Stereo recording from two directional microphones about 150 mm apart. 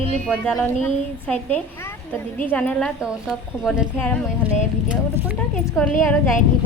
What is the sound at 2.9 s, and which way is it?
Speech, 5° right (ahead or behind).